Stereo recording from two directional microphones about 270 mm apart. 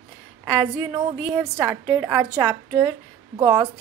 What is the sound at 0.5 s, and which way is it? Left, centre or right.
A woman's voice, centre.